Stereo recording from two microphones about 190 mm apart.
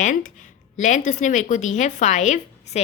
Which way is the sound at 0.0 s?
45° left (ahead or behind).